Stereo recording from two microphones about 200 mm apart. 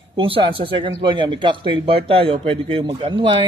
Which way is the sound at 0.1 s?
25° right (ahead or behind).